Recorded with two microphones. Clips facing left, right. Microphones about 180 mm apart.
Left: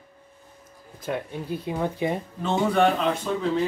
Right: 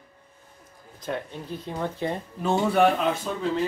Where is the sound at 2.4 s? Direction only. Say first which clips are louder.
Right 1 dB; 5° right (ahead or behind).